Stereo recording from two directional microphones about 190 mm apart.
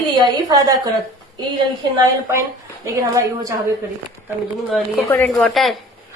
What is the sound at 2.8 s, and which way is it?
Speech, 15° right (ahead or behind).